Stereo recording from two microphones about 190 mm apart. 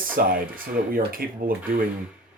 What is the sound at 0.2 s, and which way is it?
Speech, 50° right (ahead or behind).